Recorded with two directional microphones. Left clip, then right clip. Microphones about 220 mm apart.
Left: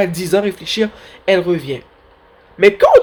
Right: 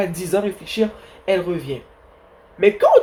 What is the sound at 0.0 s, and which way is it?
Speech, 40° left (ahead or behind).